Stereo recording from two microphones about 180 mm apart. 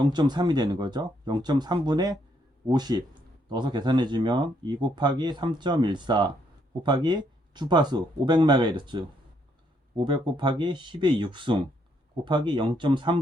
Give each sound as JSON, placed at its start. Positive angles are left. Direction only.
{"t": 0.0, "sound": "speech", "side_deg": -25}